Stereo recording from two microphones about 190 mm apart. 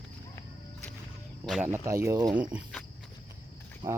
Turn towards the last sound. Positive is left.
turn(degrees=-25)  # may be behind; listen again after turning